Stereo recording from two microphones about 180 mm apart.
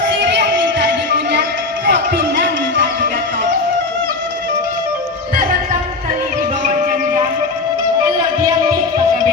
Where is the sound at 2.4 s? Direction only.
80° right.